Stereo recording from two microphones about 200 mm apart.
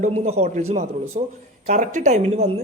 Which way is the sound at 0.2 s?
35° right (ahead or behind).